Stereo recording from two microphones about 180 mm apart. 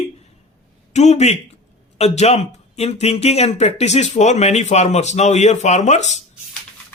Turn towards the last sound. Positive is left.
turn(degrees=40)  # may be behind; listen again after turning